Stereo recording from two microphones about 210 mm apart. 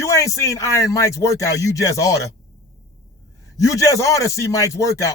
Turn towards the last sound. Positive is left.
turn(degrees=15)  # may be behind; listen again after turning